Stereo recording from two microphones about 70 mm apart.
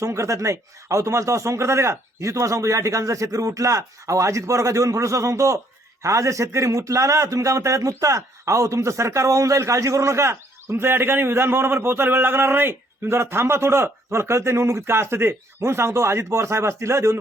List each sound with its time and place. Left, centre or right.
0.0 s a man's voice: right